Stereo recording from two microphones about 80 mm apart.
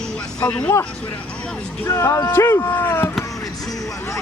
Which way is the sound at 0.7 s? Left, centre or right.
Left.